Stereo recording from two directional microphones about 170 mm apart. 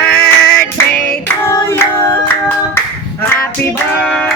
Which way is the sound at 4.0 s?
5° left (ahead or behind).